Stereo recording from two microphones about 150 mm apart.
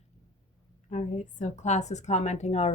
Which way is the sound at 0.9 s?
50° left (ahead or behind).